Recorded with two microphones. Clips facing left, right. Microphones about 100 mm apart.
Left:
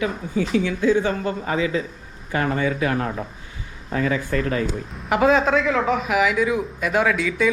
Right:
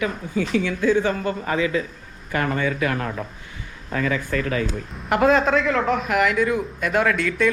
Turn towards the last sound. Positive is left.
turn(degrees=0)  # may be behind; listen again after turning